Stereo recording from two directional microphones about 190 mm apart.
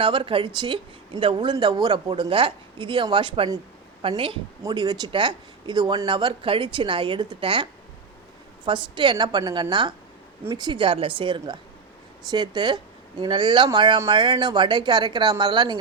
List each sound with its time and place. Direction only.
0.0 s speech: 30° right (ahead or behind)